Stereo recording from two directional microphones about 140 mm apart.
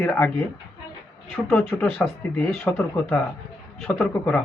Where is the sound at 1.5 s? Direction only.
10° left (ahead or behind).